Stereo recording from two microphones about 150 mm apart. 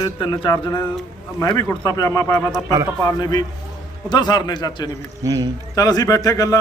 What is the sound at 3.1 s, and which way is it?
A man's voice, 25° left (ahead or behind).